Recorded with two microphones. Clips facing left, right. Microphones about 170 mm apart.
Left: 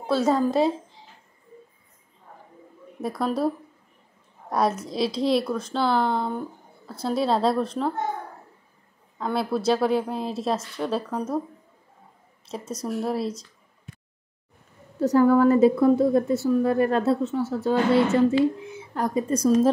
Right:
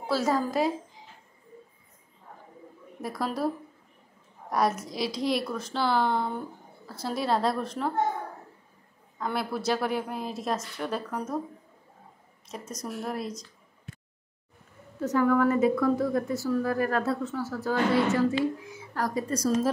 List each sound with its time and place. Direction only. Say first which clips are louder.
0.0 s a woman's voice: left 5 dB; 25° left (ahead or behind)
3.2 s a woman's voice: left 5 dB; 25° left (ahead or behind)
4.6 s a woman's voice: left 3 dB; 25° left (ahead or behind)
9.2 s a woman's voice: left 5 dB; 25° left (ahead or behind)
12.4 s a woman's voice: left 6 dB; 30° left (ahead or behind)
15.0 s a woman's voice: left 6 dB; 35° left (ahead or behind)